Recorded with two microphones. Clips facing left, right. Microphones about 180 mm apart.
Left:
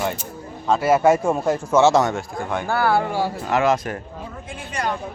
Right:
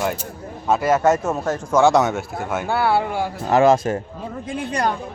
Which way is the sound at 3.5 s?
30° right (ahead or behind).